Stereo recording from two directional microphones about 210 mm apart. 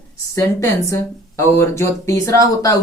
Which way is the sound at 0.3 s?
15° left (ahead or behind).